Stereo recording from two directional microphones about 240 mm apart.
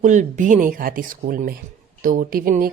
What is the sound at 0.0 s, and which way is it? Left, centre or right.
Speech, right.